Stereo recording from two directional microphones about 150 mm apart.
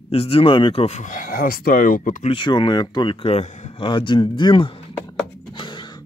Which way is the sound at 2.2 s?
35° left (ahead or behind).